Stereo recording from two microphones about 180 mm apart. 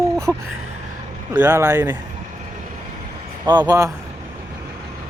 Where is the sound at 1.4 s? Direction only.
15° right (ahead or behind).